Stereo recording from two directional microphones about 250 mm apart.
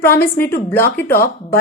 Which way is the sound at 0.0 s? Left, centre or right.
Centre.